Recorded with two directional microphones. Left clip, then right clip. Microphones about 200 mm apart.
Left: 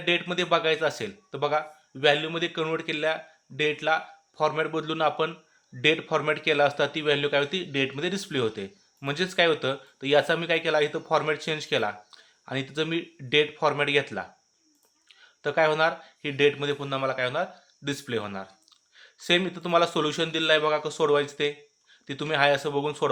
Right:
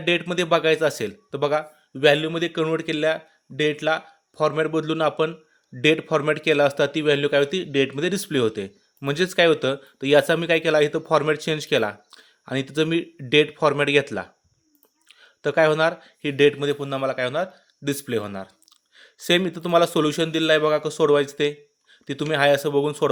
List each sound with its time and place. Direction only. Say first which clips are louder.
0.0 s a man's voice: right 3 dB; 45° right (ahead or behind)